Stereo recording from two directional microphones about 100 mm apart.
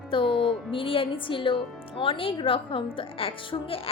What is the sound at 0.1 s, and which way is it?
A woman's voice, 60° left (ahead or behind).